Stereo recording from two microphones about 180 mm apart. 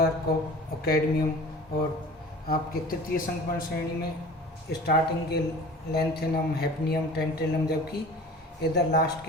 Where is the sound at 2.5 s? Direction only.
55° left (ahead or behind).